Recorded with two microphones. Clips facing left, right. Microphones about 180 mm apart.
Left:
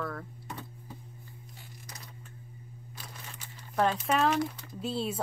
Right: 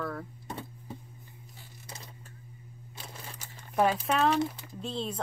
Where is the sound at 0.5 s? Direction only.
25° right (ahead or behind).